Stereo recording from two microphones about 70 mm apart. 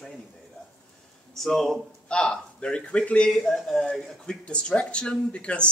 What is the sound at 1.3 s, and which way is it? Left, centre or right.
Speech, centre.